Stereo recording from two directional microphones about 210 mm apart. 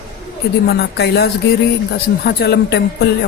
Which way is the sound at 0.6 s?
50° left (ahead or behind).